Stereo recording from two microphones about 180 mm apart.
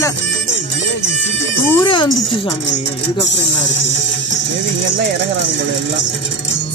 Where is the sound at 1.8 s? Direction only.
25° left (ahead or behind).